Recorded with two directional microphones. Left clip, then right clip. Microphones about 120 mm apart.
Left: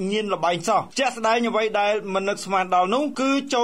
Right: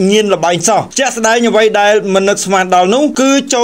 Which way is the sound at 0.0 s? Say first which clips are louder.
Right 13 dB; 25° right (ahead or behind).